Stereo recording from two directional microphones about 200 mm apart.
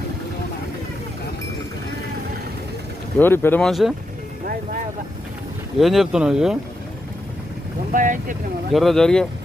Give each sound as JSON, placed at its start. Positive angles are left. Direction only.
{"t": 3.2, "sound": "speech", "side_deg": 10}
{"t": 5.8, "sound": "speech", "side_deg": 0}
{"t": 7.9, "sound": "speech", "side_deg": -40}
{"t": 8.7, "sound": "speech", "side_deg": 0}